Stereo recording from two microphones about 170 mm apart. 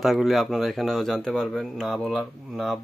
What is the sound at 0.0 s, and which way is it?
Speech, centre (ahead or behind).